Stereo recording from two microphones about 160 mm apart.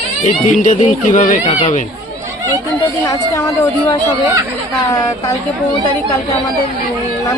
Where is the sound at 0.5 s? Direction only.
50° left (ahead or behind).